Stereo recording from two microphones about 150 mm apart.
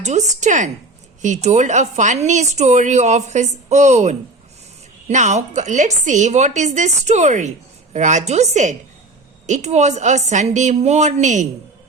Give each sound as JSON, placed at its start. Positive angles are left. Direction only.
{"t": 0.0, "sound": "a woman's voice", "side_deg": -50}